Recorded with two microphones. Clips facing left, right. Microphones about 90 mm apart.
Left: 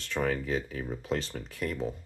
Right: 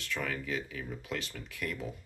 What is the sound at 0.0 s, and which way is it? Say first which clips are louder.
Speech: left 6 dB; 35° left (ahead or behind).